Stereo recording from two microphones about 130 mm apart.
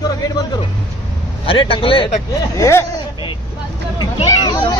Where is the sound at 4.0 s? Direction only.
35° left (ahead or behind).